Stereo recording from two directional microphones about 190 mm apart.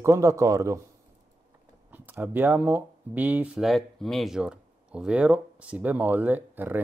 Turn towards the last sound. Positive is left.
turn(degrees=-10)  # may be behind; listen again after turning